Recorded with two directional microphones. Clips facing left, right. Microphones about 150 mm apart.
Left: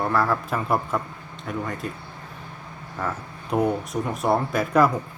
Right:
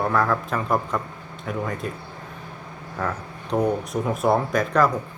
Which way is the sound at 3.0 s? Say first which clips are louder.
Right 1 dB; 5° left (ahead or behind).